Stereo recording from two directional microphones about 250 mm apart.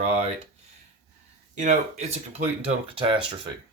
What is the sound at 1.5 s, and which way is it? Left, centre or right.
Speech, right.